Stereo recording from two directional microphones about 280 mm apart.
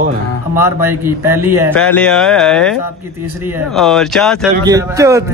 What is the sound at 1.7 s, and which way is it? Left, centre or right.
Speech, centre.